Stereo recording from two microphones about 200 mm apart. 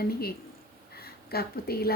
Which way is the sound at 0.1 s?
50° left (ahead or behind).